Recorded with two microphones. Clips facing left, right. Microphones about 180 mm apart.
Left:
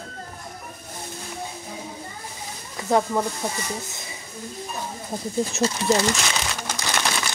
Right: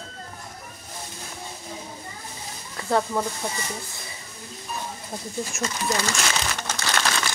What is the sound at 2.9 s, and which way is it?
Speech, 15° left (ahead or behind).